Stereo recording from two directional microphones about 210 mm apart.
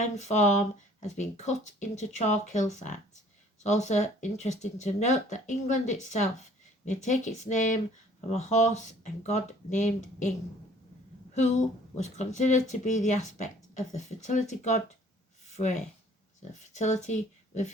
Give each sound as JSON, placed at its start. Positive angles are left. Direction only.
{"t": 0.0, "sound": "speech", "side_deg": 35}
{"t": 11.3, "sound": "speech", "side_deg": 35}
{"t": 15.4, "sound": "a sound", "side_deg": 35}
{"t": 16.4, "sound": "speech", "side_deg": 35}